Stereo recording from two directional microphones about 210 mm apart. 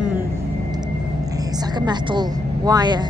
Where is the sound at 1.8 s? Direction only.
20° right (ahead or behind).